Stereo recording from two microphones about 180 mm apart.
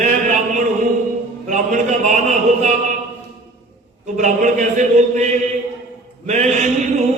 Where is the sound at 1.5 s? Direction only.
40° right (ahead or behind).